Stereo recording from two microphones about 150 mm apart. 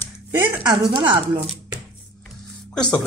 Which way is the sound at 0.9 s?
35° right (ahead or behind).